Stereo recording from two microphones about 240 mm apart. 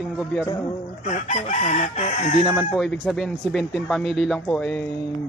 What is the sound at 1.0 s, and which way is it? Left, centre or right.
Chicken, left.